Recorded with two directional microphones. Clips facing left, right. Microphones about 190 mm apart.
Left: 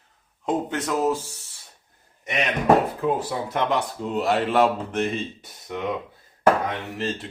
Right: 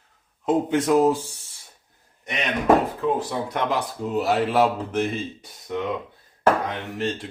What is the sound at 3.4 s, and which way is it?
Speech, centre (ahead or behind).